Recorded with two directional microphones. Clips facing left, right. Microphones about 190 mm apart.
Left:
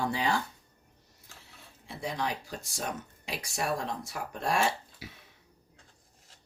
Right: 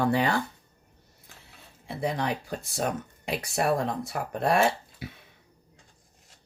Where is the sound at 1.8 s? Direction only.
55° right (ahead or behind).